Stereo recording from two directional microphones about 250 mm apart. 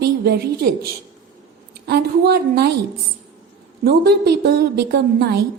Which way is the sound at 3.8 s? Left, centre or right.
Right.